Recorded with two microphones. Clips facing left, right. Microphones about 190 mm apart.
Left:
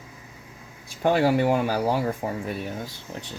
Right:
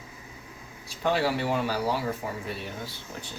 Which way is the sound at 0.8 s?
50° left (ahead or behind).